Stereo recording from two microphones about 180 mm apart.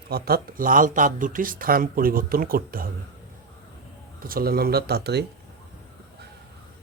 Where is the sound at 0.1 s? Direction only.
60° right (ahead or behind).